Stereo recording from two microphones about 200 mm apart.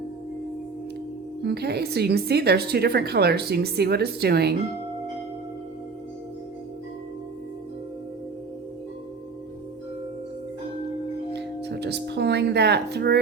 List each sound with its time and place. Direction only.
1.4 s speech: 55° right (ahead or behind)
11.3 s music: 55° right (ahead or behind)